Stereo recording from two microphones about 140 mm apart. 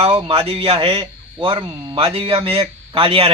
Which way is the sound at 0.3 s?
45° right (ahead or behind).